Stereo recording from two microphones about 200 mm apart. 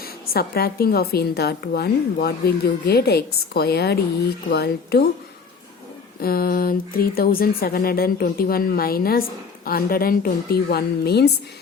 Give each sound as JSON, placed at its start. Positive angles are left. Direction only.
{"t": 0.0, "sound": "a woman's voice", "side_deg": 50}
{"t": 6.2, "sound": "a woman's voice", "side_deg": 50}